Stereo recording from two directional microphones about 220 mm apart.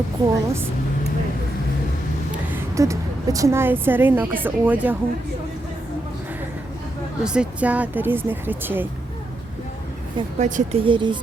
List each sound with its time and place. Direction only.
0.2 s a woman's voice: 15° right (ahead or behind)
2.5 s a woman's voice: 15° right (ahead or behind)
7.3 s a woman's voice: 5° right (ahead or behind)
10.3 s speech: 35° right (ahead or behind)